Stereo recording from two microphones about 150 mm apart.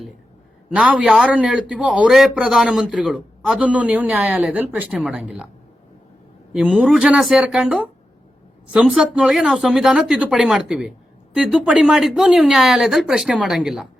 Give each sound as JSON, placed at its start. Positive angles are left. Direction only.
{"t": 0.7, "sound": "a man's voice", "side_deg": -5}
{"t": 6.5, "sound": "speech", "side_deg": 0}